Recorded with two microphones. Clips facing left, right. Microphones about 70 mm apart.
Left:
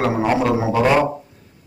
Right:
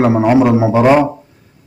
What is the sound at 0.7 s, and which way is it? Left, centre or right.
Speech, right.